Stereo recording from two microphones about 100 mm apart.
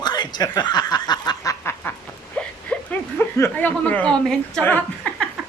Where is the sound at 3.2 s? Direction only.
25° left (ahead or behind).